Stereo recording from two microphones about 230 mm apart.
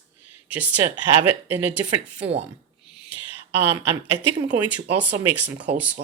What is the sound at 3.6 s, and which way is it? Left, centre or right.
Speech, centre.